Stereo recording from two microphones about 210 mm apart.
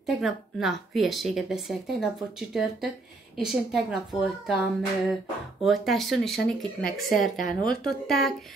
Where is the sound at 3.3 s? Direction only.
Centre (ahead or behind).